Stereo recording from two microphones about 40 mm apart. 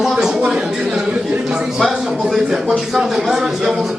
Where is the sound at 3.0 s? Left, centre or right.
Centre.